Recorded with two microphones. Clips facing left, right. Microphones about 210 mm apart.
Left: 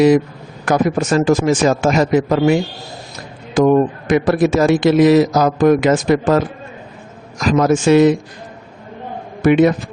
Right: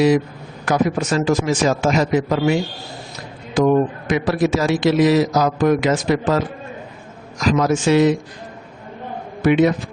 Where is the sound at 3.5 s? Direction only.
55° left (ahead or behind).